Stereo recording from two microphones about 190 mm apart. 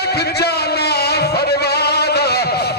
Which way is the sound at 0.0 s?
60° left (ahead or behind).